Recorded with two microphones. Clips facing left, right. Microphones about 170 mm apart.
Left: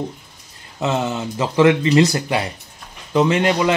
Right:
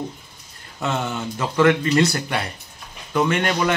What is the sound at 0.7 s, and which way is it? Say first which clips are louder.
A man's voice: left 4 dB; 20° left (ahead or behind).